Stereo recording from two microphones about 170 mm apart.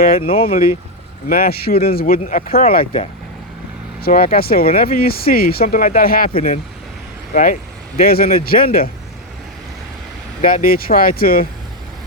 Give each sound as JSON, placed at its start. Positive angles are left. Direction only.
{"t": 0.2, "sound": "speech", "side_deg": 35}
{"t": 0.4, "sound": "speech", "side_deg": 55}
{"t": 4.0, "sound": "speech", "side_deg": 60}
{"t": 7.3, "sound": "speech", "side_deg": 45}
{"t": 10.4, "sound": "speech", "side_deg": 55}